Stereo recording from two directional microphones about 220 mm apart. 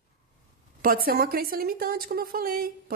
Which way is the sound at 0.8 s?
40° right (ahead or behind).